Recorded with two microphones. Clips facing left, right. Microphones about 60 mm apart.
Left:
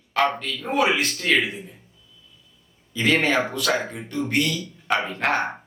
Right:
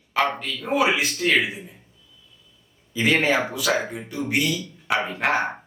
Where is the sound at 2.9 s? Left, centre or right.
Centre.